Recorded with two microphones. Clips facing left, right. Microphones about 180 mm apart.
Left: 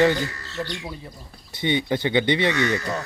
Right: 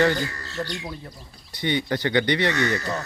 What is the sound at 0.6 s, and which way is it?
Speech, 10° left (ahead or behind).